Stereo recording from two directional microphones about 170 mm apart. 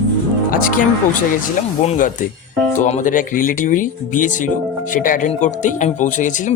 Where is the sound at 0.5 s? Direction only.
50° left (ahead or behind).